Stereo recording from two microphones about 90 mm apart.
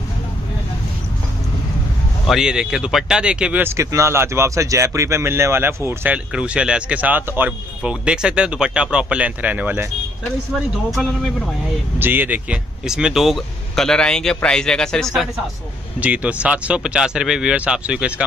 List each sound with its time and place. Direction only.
2.2 s speech: 5° right (ahead or behind)
3.6 s speech: 35° right (ahead or behind)
6.0 s speech: 15° right (ahead or behind)
10.5 s speech: 5° right (ahead or behind)
12.0 s speech: 20° right (ahead or behind)
12.8 s speech: 5° right (ahead or behind)
16.0 s speech: 15° right (ahead or behind)